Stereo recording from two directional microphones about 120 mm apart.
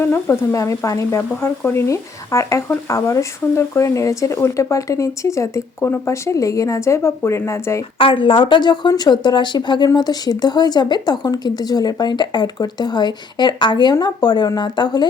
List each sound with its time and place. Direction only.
0.0 s speech: 20° left (ahead or behind)
7.9 s speech: 45° left (ahead or behind)